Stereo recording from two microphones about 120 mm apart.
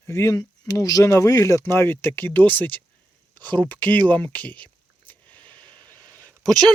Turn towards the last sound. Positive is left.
turn(degrees=0)  # may be behind; listen again after turning